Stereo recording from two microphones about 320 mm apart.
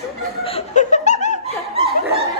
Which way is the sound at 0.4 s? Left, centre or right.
Left.